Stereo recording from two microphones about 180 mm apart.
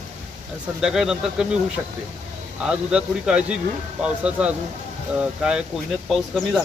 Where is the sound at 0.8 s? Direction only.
5° right (ahead or behind).